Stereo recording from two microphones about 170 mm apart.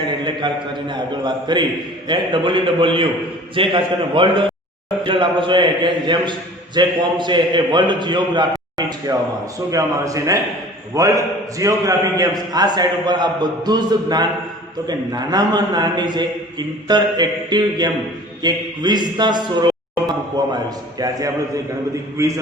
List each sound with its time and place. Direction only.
0.3 s a man's voice: 25° right (ahead or behind)
22.2 s a man's voice: 20° right (ahead or behind)